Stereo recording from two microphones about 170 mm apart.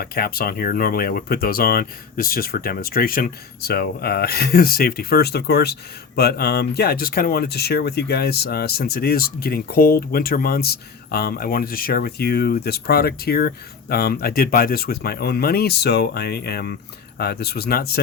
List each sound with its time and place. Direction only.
0.0 s speech: 60° left (ahead or behind)